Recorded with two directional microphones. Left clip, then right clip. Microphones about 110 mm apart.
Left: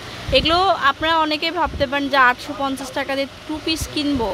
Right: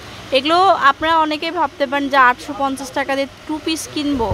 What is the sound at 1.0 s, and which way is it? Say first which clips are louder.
Speech: right 2 dB; 20° right (ahead or behind).